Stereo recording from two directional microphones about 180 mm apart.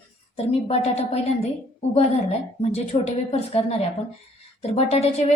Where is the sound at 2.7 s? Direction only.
35° left (ahead or behind).